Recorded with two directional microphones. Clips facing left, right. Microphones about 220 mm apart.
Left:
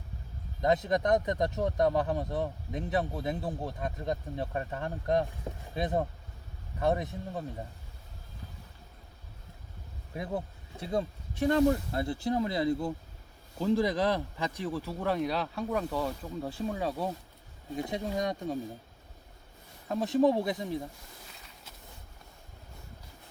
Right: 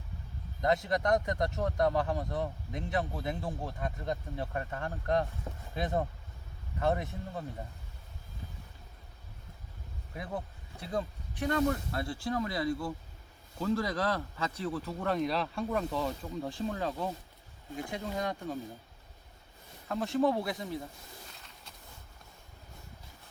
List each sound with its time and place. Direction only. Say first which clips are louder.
0.6 s speech: left 2 dB; 20° left (ahead or behind)
10.2 s speech: left 4 dB; 25° left (ahead or behind)
19.9 s speech: left 3 dB; 20° left (ahead or behind)